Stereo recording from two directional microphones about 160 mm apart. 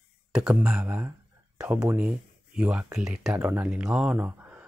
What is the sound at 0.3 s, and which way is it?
Speech, 5° right (ahead or behind).